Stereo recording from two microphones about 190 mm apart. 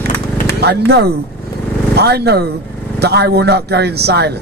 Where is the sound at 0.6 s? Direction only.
60° right (ahead or behind).